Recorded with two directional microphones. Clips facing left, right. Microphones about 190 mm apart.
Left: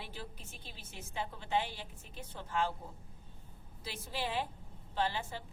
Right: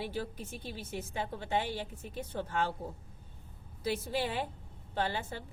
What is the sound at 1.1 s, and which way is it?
Speech, 60° right (ahead or behind).